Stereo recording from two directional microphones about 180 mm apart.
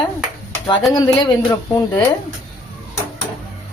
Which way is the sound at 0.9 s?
20° left (ahead or behind).